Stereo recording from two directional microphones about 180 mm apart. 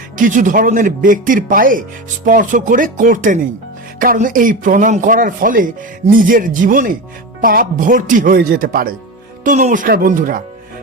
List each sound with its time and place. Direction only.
0.2 s speech: 45° right (ahead or behind)